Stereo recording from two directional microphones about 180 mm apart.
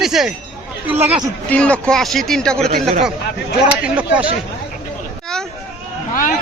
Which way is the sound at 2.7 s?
55° right (ahead or behind).